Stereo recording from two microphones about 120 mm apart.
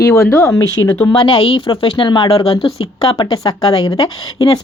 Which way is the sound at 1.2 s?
50° left (ahead or behind).